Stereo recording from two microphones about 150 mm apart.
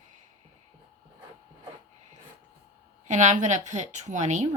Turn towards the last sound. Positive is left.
turn(degrees=-50)  # may be behind; listen again after turning